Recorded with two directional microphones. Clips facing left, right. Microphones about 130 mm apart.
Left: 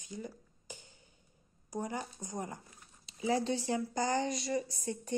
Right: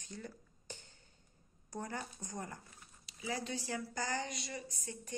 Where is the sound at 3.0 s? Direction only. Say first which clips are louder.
Left 9 dB; 30° left (ahead or behind).